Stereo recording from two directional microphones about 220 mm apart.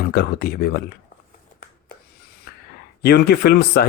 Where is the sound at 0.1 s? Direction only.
45° left (ahead or behind).